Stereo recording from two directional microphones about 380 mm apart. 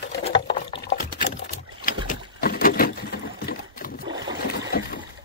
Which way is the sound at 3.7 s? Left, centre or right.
Left.